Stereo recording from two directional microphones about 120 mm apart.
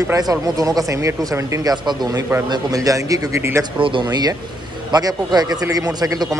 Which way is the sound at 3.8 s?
40° right (ahead or behind).